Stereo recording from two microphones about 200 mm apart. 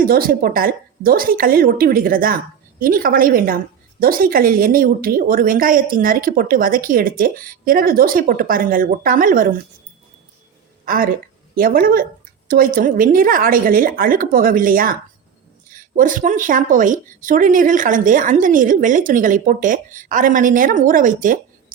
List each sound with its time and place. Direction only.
0.0 s a woman's voice: 45° right (ahead or behind)
10.8 s a woman's voice: 45° right (ahead or behind)